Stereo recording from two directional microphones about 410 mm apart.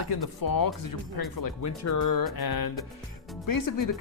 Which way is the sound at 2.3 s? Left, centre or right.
Left.